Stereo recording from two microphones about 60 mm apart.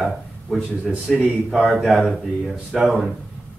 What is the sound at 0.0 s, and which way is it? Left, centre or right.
A man's voice, centre.